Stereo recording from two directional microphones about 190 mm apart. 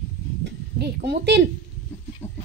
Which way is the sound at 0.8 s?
60° right (ahead or behind).